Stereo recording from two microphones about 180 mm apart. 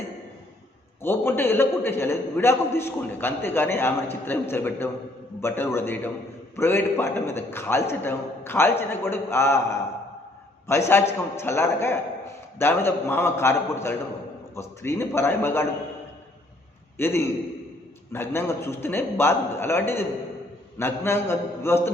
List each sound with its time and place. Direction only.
1.0 s a man's voice: 15° left (ahead or behind)
10.7 s a man's voice: 15° left (ahead or behind)
17.0 s a man's voice: 15° left (ahead or behind)